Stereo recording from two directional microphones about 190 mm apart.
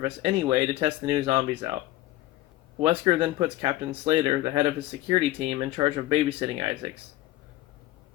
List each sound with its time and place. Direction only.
0.0 s speech: 30° right (ahead or behind)
2.8 s speech: 30° right (ahead or behind)